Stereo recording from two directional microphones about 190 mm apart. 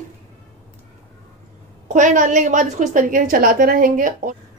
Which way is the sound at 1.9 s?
40° right (ahead or behind).